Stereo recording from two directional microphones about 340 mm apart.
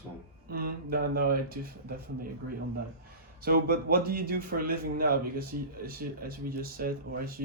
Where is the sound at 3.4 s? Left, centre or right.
Right.